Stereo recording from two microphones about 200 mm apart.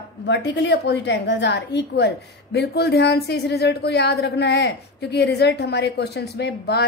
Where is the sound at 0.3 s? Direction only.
60° left (ahead or behind).